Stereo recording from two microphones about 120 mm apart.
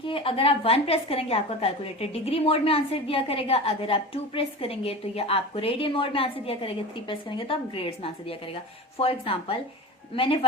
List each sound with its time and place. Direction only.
0.0 s a woman's voice: 50° left (ahead or behind)